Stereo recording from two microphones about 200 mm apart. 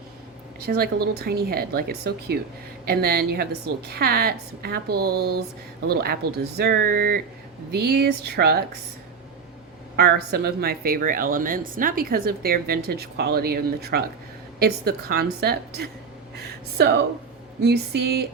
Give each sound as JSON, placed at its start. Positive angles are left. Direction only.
{"t": 0.7, "sound": "speech", "side_deg": -50}
{"t": 9.9, "sound": "speech", "side_deg": -55}